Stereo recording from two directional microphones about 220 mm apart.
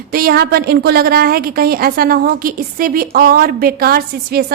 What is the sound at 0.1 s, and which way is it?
A woman's voice, 40° right (ahead or behind).